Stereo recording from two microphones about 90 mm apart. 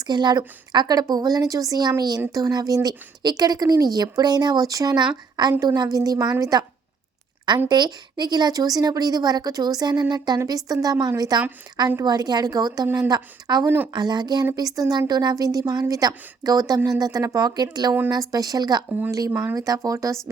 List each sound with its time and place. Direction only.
0.1 s speech: 50° right (ahead or behind)
7.7 s speech: 50° right (ahead or behind)
13.7 s speech: 20° right (ahead or behind)
13.9 s speech: 50° right (ahead or behind)
18.9 s speech: 20° right (ahead or behind)
19.5 s speech: 40° right (ahead or behind)